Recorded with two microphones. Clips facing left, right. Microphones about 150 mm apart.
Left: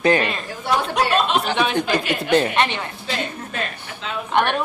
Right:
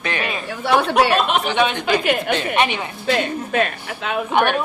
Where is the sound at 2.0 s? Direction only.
55° right (ahead or behind).